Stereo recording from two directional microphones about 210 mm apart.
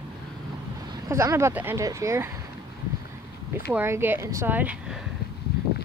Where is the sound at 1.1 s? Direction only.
15° right (ahead or behind).